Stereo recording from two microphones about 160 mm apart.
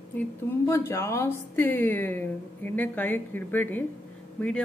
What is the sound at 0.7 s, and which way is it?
A woman's voice, 15° left (ahead or behind).